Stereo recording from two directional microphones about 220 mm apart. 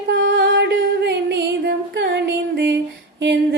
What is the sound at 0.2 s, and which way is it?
Music, 55° right (ahead or behind).